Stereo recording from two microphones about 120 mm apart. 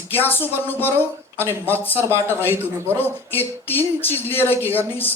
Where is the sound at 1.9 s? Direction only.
20° right (ahead or behind).